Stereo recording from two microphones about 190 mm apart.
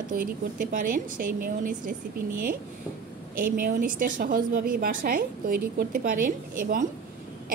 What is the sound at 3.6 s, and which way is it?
A woman's voice, 45° right (ahead or behind).